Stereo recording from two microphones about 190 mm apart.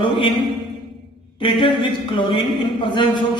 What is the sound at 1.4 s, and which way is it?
Speech, 25° left (ahead or behind).